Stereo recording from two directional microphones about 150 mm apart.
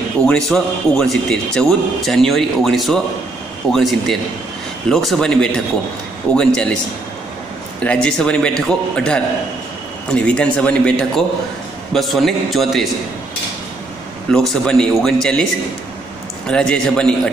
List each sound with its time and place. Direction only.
0.2 s a man's voice: centre (ahead or behind)
7.8 s a man's voice: 5° left (ahead or behind)
14.3 s a man's voice: 5° left (ahead or behind)
16.4 s a man's voice: 5° left (ahead or behind)